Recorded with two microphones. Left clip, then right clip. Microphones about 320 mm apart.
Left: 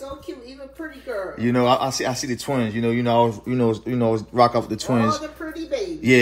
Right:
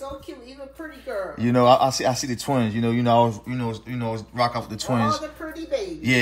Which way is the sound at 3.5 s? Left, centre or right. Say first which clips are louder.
Left 8 dB; centre.